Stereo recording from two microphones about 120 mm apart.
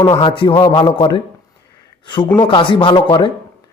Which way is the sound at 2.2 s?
15° left (ahead or behind).